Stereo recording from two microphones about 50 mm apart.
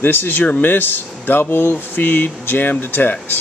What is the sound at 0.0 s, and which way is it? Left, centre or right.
Speech, left.